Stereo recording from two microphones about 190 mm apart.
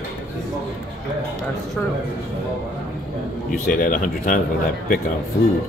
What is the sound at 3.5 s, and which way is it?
Speech, 45° left (ahead or behind).